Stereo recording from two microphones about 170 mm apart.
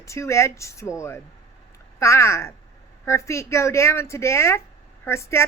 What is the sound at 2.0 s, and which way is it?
Speech, 15° left (ahead or behind).